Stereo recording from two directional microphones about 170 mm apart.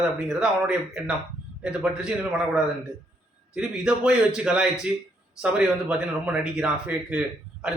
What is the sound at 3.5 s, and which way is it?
A man's voice, 5° right (ahead or behind).